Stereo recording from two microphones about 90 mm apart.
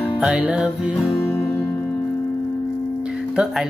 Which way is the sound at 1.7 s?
20° left (ahead or behind).